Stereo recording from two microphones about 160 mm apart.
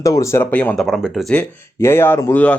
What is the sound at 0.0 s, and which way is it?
Speech, 20° left (ahead or behind).